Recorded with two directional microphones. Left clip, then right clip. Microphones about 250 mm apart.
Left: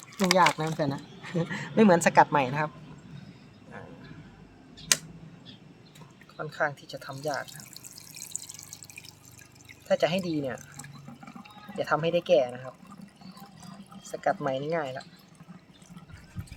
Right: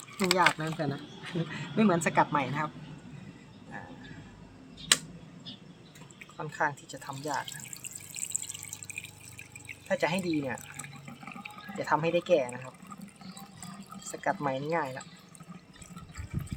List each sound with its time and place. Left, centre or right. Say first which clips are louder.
0.2 s a woman's voice: left 3 dB; left
6.3 s speech: left 1 dB; centre
9.9 s speech: left 3 dB; centre
11.8 s speech: left 2 dB; centre
14.1 s speech: left 3 dB; centre